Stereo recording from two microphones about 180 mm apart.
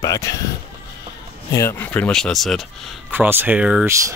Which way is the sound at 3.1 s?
10° right (ahead or behind).